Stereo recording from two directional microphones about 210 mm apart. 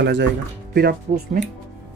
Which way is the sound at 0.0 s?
55° right (ahead or behind).